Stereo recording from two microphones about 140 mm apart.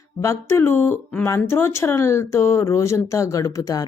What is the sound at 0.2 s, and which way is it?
A woman's voice, 20° left (ahead or behind).